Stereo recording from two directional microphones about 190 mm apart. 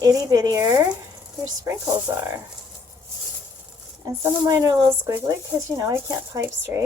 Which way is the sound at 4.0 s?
20° right (ahead or behind).